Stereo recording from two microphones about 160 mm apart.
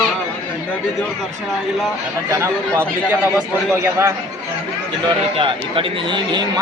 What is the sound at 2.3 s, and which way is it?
A man's voice, 15° right (ahead or behind).